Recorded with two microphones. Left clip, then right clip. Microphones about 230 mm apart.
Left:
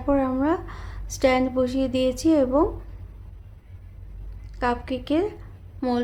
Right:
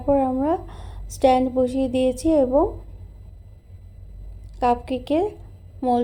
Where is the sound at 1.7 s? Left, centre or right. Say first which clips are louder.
Right 2 dB; centre.